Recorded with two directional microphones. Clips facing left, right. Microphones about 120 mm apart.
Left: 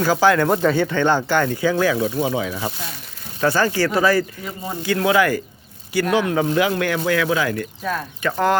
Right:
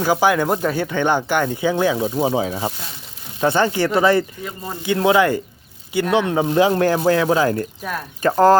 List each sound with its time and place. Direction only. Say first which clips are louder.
0.0 s speech: left 1 dB; 15° right (ahead or behind); by 2.7 s 30° right (ahead or behind)
3.4 s speech: right 1 dB; 20° right (ahead or behind)